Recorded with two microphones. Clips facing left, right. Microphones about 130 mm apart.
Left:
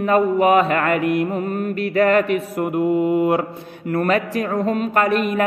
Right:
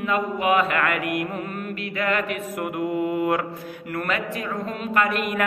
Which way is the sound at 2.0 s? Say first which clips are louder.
Left 9 dB; 40° left (ahead or behind).